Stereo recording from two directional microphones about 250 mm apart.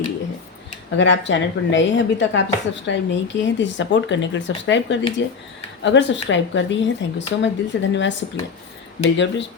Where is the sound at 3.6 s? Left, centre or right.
Left.